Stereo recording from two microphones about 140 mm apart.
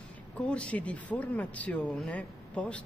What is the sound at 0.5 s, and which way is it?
Speech, 10° left (ahead or behind).